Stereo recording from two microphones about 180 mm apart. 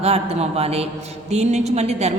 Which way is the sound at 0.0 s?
35° right (ahead or behind).